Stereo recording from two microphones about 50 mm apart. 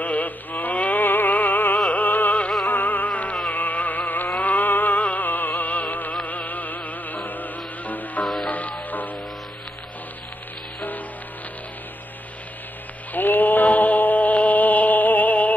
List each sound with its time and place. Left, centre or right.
0.0 s music: left
13.1 s chant: left